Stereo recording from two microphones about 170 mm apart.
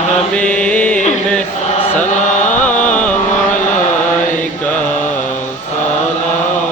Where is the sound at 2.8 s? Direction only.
10° left (ahead or behind).